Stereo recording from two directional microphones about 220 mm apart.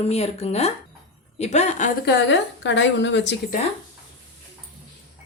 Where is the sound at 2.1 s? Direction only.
55° left (ahead or behind).